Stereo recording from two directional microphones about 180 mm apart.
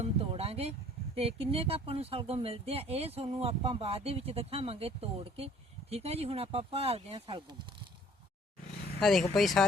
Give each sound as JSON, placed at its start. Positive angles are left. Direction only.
{"t": 0.0, "sound": "a sound", "side_deg": -35}
{"t": 1.1, "sound": "speech", "side_deg": -30}
{"t": 9.0, "sound": "speech", "side_deg": 0}